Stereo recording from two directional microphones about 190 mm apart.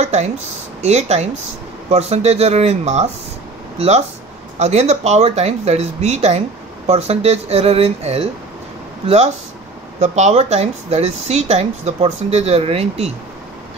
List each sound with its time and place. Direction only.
0.0 s speech: 35° right (ahead or behind)